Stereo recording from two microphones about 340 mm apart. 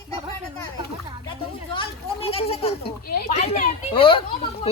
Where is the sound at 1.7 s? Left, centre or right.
Centre.